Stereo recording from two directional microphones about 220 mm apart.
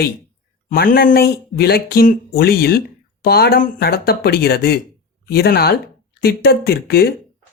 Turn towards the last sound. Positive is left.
turn(degrees=45)  # may be behind; listen again after turning